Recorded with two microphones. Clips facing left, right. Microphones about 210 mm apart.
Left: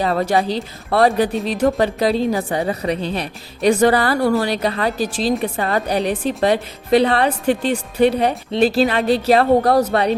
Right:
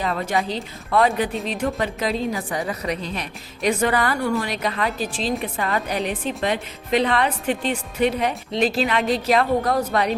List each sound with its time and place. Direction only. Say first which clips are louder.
0.0 s a woman's voice: left 6 dB; 35° left (ahead or behind)